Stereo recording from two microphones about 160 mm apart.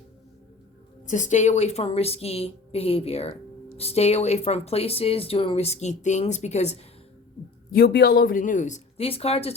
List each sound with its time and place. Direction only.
1.0 s speech: 50° left (ahead or behind)
7.7 s speech: 85° left; by 9.6 s 40° left (ahead or behind)